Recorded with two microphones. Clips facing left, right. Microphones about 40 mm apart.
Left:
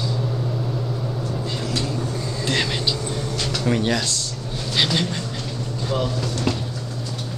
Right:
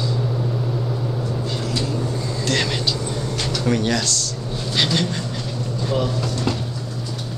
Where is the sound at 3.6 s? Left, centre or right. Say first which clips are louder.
Right 1 dB; centre.